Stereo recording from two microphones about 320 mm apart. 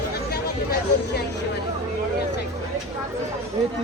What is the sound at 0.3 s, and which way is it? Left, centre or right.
Speech, left.